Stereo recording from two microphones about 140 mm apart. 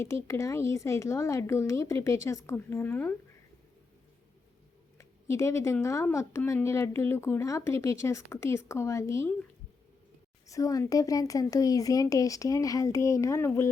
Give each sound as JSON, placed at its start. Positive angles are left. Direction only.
{"t": 0.0, "sound": "speech", "side_deg": 20}
{"t": 4.9, "sound": "speech", "side_deg": 20}
{"t": 10.4, "sound": "speech", "side_deg": 25}